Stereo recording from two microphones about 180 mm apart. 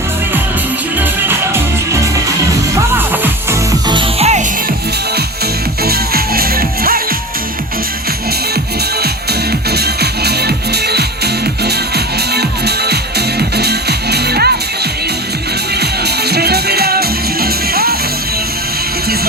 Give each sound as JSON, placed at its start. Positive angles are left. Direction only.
{"t": 0.9, "sound": "music", "side_deg": -10}
{"t": 3.2, "sound": "music", "side_deg": -20}
{"t": 4.2, "sound": "music", "side_deg": -40}
{"t": 5.8, "sound": "music", "side_deg": -55}
{"t": 9.5, "sound": "music", "side_deg": -60}
{"t": 15.8, "sound": "music", "side_deg": -65}